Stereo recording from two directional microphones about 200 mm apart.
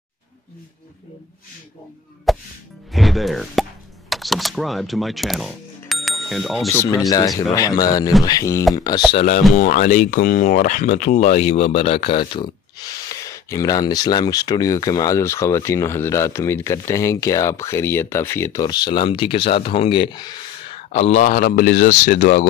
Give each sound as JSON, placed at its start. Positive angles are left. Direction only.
{"t": 2.3, "sound": "speech", "side_deg": 0}
{"t": 6.7, "sound": "speech", "side_deg": 15}
{"t": 9.1, "sound": "speech", "side_deg": 35}
{"t": 20.9, "sound": "speech", "side_deg": 35}